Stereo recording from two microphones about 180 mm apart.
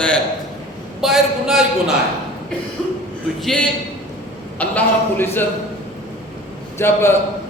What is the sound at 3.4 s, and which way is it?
A man's voice, 5° left (ahead or behind).